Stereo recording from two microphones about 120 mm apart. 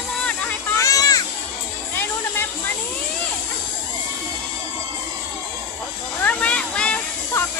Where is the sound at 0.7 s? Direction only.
30° left (ahead or behind).